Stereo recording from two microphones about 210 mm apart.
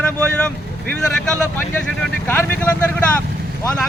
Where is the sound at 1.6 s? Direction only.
5° left (ahead or behind).